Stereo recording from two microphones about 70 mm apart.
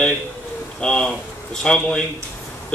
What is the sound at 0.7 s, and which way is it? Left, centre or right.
A man's voice, centre.